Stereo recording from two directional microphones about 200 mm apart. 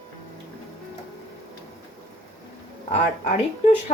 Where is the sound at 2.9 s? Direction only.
35° left (ahead or behind).